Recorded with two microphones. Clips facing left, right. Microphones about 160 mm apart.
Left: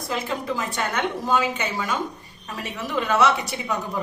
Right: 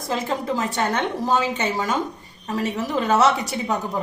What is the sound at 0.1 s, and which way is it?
A woman's voice, 35° right (ahead or behind).